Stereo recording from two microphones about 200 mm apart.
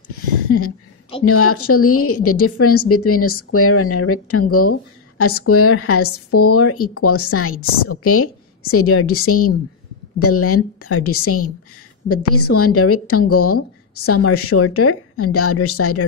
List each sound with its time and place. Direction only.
0.5 s a woman's voice: 90° left